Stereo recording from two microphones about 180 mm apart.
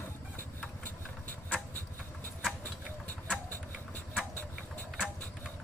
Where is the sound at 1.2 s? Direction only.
10° left (ahead or behind).